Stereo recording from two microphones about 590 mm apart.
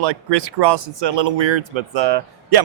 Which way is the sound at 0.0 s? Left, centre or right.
Right.